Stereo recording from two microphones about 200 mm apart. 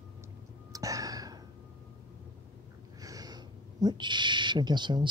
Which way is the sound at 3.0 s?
20° right (ahead or behind).